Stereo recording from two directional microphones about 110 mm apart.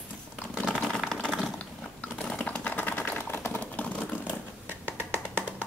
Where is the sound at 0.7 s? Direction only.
5° left (ahead or behind).